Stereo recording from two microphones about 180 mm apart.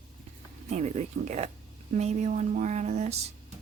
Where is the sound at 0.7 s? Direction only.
40° right (ahead or behind).